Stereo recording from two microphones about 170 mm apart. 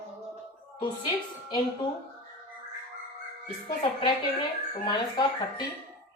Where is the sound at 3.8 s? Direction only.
30° left (ahead or behind).